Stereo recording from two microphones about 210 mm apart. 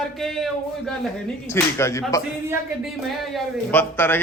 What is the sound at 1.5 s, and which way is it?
Speech, 15° left (ahead or behind).